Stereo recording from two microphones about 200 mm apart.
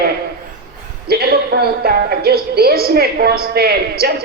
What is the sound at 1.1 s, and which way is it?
A woman's voice, 50° right (ahead or behind).